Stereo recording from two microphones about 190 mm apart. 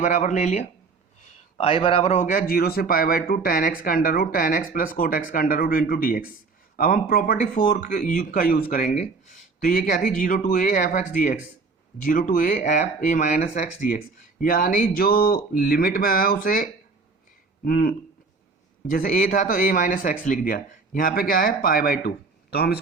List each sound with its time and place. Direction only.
0.0 s a man's voice: 40° left (ahead or behind)
2.1 s speech: 45° left (ahead or behind)
17.7 s speech: 50° left (ahead or behind)